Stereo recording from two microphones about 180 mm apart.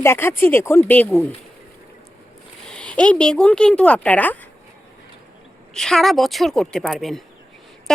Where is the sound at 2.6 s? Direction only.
5° left (ahead or behind).